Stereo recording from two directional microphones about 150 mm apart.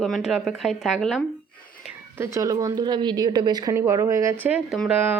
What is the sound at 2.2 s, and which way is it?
Speech, 20° right (ahead or behind).